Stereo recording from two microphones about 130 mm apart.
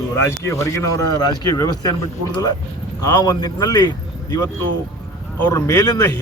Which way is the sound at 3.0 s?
30° left (ahead or behind).